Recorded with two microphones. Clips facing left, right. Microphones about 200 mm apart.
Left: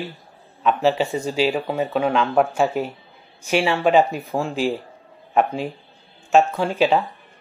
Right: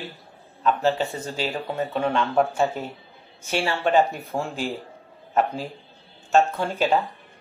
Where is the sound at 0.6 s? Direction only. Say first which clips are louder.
Left 3 dB; 15° left (ahead or behind).